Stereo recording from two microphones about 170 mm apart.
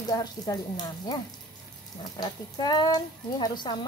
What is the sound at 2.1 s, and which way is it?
Speech, 25° left (ahead or behind).